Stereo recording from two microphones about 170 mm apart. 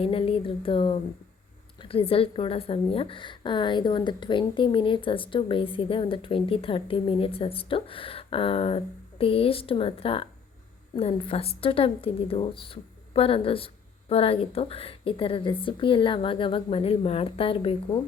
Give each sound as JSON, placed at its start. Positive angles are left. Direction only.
{"t": 0.0, "sound": "a woman's voice", "side_deg": 35}